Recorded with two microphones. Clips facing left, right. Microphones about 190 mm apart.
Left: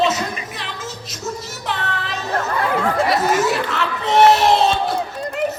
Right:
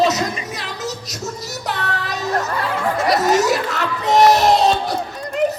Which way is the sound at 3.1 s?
40° right (ahead or behind).